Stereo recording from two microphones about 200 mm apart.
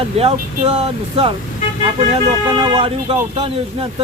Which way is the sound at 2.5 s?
25° right (ahead or behind).